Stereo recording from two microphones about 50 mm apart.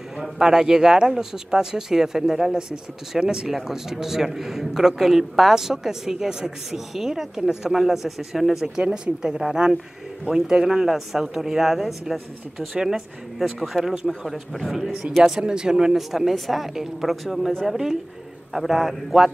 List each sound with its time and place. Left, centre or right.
0.2 s a man's voice: centre
8.8 s speech: centre
9.4 s a man's voice: centre
16.0 s speech: centre